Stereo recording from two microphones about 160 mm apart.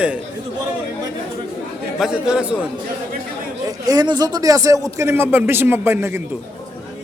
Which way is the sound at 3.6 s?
25° right (ahead or behind).